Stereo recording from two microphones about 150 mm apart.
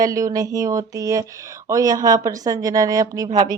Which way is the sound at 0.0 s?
20° right (ahead or behind).